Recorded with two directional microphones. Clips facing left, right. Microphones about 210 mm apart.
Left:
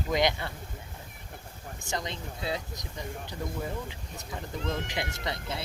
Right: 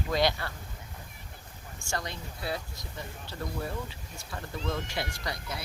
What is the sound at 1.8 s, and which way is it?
Speech, 20° left (ahead or behind).